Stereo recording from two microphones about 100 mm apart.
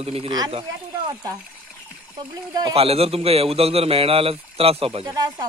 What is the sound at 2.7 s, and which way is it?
A man's voice, 80° right.